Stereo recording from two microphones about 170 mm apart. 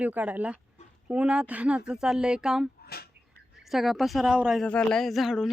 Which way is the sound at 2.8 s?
65° left (ahead or behind).